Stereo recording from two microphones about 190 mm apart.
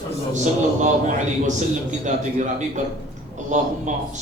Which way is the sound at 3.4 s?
40° right (ahead or behind).